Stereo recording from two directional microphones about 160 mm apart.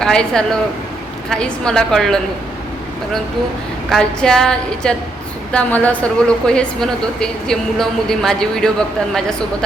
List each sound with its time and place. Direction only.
0.0 s a woman's voice: 5° left (ahead or behind)
3.8 s a woman's voice: centre (ahead or behind)